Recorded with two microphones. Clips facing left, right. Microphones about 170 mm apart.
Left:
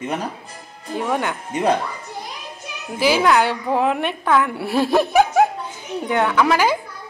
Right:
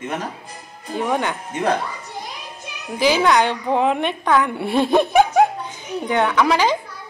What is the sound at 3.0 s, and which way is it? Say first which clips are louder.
A woman's voice: even; 10° left (ahead or behind).